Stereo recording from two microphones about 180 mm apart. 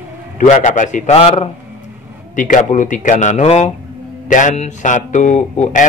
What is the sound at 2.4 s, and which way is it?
Speech, 45° left (ahead or behind).